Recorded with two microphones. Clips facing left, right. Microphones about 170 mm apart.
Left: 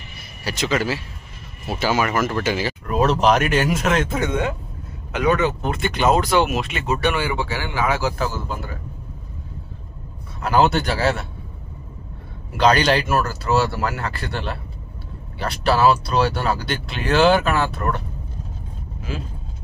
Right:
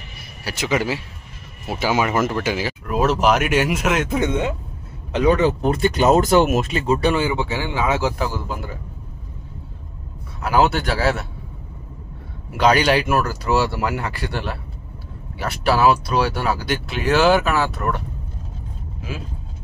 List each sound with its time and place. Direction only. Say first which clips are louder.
0.5 s speech: even; 10° right (ahead or behind)
2.3 s speech: even; 10° right (ahead or behind); by 6.8 s 45° right (ahead or behind)
6.9 s speech: right 3 dB; 30° right (ahead or behind)
10.4 s a man's voice: even; 5° right (ahead or behind)
12.5 s speech: right 1 dB; 10° right (ahead or behind)